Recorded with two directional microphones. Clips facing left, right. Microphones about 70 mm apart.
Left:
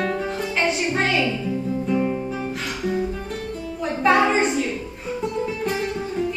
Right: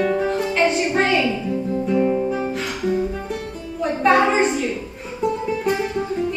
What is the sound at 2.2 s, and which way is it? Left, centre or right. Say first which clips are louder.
Music: right 5 dB; centre.